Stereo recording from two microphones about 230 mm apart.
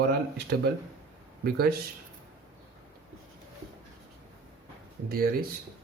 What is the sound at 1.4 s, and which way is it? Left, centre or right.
Speech, right.